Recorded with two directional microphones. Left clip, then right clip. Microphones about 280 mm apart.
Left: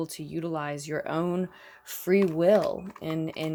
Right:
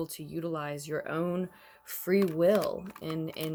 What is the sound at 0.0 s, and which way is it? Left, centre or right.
Speech, centre.